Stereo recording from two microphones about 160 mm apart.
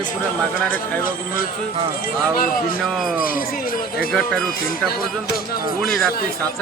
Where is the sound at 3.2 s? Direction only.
65° left (ahead or behind).